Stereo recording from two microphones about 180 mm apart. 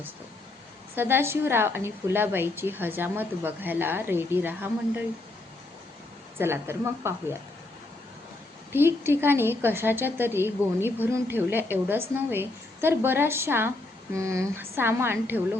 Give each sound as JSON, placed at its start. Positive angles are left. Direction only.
{"t": 0.9, "sound": "a woman's voice", "side_deg": -10}
{"t": 6.4, "sound": "a woman's voice", "side_deg": -15}
{"t": 8.7, "sound": "a woman's voice", "side_deg": -10}